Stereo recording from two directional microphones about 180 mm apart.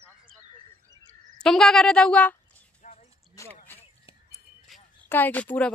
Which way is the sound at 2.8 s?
45° left (ahead or behind).